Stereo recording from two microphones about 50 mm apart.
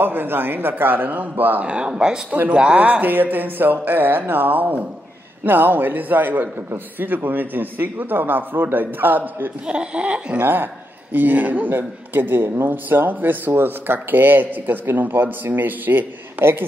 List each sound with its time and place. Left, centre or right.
0.0 s a man's voice: right
1.7 s speech: centre
2.8 s a man's voice: right
9.7 s speech: right
10.4 s a man's voice: right